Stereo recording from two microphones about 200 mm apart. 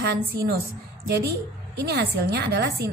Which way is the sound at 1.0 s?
55° right (ahead or behind).